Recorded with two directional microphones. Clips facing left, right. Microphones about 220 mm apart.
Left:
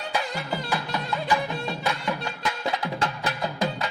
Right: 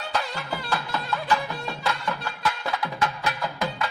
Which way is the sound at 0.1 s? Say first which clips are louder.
Left 1 dB; 15° left (ahead or behind).